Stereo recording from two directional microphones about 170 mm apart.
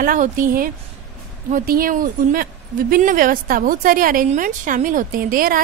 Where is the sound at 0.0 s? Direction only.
55° right (ahead or behind).